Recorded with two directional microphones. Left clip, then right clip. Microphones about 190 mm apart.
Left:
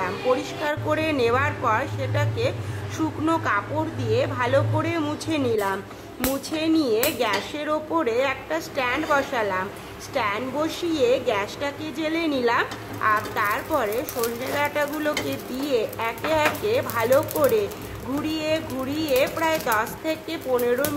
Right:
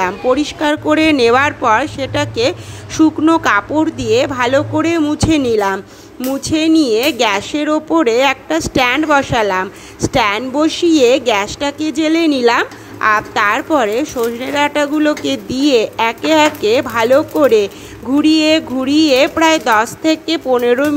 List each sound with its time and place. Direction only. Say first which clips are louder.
0.0 s a woman's voice: right 9 dB; 35° right (ahead or behind)